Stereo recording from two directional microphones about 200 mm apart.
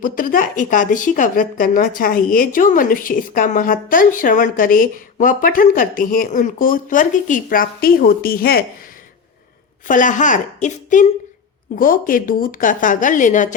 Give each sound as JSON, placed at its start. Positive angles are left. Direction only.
{"t": 0.0, "sound": "speech", "side_deg": 45}
{"t": 9.8, "sound": "a woman's voice", "side_deg": 40}